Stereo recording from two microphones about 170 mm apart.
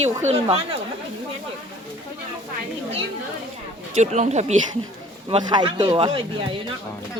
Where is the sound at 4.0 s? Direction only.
40° right (ahead or behind).